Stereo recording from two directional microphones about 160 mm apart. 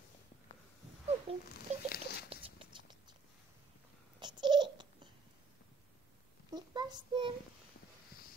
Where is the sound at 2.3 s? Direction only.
35° right (ahead or behind).